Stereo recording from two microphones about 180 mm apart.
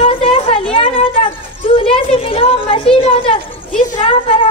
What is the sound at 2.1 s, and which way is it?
A woman's voice, 30° left (ahead or behind).